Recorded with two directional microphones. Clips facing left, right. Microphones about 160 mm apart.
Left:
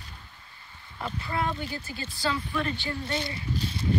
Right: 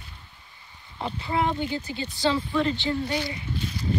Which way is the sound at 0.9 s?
20° right (ahead or behind).